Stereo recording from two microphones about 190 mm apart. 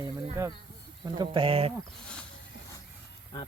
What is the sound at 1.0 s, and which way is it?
Speech, 25° right (ahead or behind).